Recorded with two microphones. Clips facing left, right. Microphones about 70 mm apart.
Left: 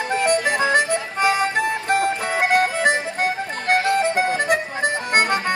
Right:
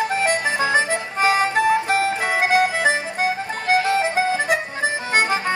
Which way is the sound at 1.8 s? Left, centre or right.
Centre.